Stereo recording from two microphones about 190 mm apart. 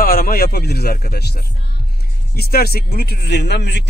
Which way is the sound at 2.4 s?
55° left (ahead or behind).